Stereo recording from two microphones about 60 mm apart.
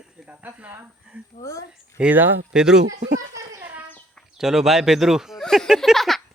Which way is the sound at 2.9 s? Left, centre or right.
Right.